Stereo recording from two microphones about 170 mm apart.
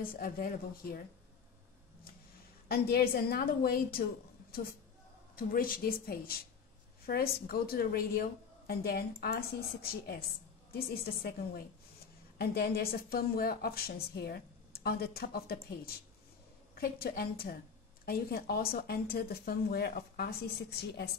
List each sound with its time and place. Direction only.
0.0 s a woman's voice: 60° left (ahead or behind)
2.7 s a woman's voice: 65° left (ahead or behind)